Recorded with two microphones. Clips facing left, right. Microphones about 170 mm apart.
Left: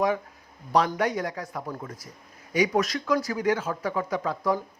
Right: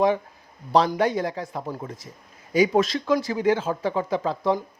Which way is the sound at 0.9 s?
30° right (ahead or behind).